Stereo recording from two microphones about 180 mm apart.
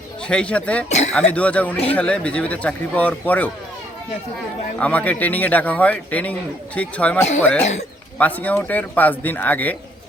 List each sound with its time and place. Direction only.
0.3 s speech: 5° left (ahead or behind)
4.8 s speech: 10° left (ahead or behind)
7.6 s speech: 40° left (ahead or behind)
8.2 s speech: 10° left (ahead or behind)